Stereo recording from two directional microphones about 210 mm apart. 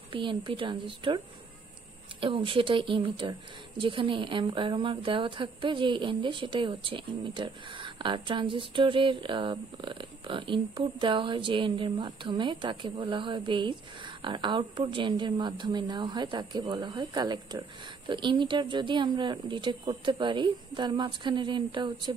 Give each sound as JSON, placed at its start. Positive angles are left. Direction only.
{"t": 0.1, "sound": "a woman's voice", "side_deg": -25}